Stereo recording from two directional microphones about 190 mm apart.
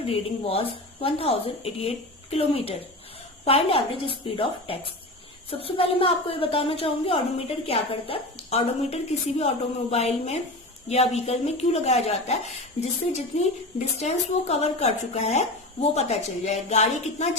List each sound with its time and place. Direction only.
0.0 s a woman's voice: 30° left (ahead or behind)